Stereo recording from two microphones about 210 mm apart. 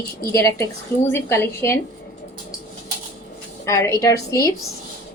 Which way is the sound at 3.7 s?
15° left (ahead or behind).